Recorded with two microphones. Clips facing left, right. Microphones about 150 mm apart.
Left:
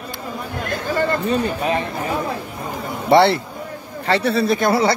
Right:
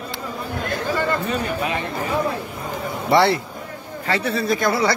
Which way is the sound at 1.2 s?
35° left (ahead or behind).